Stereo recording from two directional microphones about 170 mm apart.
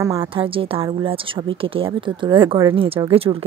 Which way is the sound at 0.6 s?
35° right (ahead or behind).